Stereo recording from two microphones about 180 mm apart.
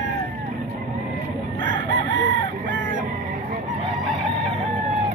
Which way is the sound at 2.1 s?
90° right.